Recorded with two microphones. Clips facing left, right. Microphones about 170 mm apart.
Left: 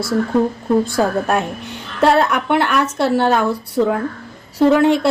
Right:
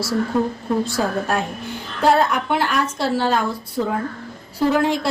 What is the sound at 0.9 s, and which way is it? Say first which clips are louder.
A woman's voice: left 4 dB; 60° left (ahead or behind).